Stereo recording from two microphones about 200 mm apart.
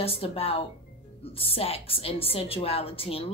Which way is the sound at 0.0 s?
30° left (ahead or behind).